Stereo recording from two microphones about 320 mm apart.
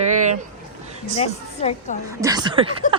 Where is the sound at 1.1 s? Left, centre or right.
Centre.